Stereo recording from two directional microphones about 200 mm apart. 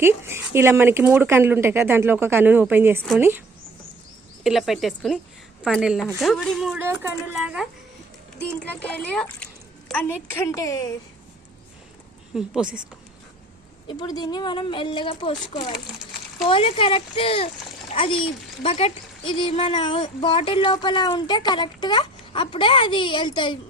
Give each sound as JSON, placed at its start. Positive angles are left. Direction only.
{"t": 0.0, "sound": "speech", "side_deg": -10}
{"t": 4.4, "sound": "a woman's voice", "side_deg": 0}
{"t": 8.4, "sound": "a child's voice", "side_deg": 5}
{"t": 10.3, "sound": "a child's voice", "side_deg": 15}
{"t": 12.3, "sound": "a woman's voice", "side_deg": -5}
{"t": 13.8, "sound": "speech", "side_deg": 20}